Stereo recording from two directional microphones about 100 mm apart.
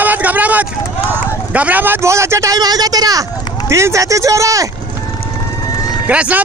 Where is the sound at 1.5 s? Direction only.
15° right (ahead or behind); by 4.6 s 35° right (ahead or behind).